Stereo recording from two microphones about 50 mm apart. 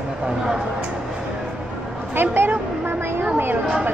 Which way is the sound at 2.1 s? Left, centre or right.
Right.